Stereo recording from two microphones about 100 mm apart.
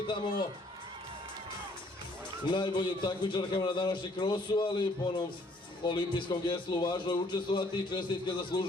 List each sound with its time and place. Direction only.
2.5 s a man's voice: 50° left (ahead or behind)